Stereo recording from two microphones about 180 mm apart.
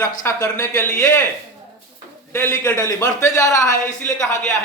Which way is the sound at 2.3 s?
15° left (ahead or behind).